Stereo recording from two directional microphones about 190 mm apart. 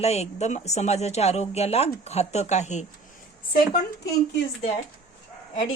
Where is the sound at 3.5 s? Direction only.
55° left (ahead or behind).